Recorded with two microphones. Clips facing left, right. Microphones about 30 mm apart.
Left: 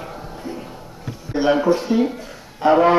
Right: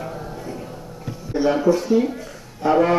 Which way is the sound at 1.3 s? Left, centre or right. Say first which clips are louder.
Left 1 dB; left.